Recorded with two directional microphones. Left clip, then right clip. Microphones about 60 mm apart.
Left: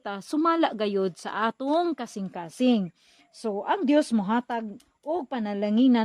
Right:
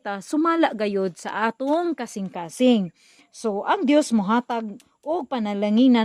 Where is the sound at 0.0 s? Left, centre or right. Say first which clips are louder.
Right 3 dB; right.